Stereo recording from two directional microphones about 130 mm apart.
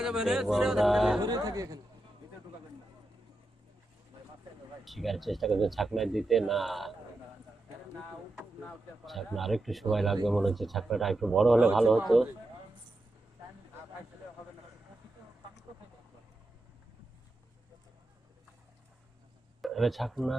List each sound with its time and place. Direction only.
0.0 s speech: 5° right (ahead or behind)
1.2 s speech: 30° right (ahead or behind)
4.9 s speech: centre (ahead or behind)
7.9 s speech: centre (ahead or behind)
19.6 s speech: centre (ahead or behind)